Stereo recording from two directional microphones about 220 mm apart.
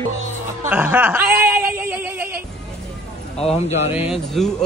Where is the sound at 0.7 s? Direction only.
10° right (ahead or behind).